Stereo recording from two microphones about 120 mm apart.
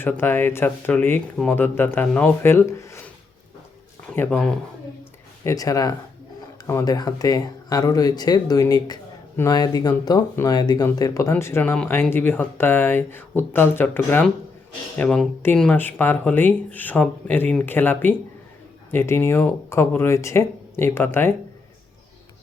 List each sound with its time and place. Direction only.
0.0 s speech: 20° left (ahead or behind)
4.0 s speech: 10° left (ahead or behind)
5.4 s speech: 25° left (ahead or behind)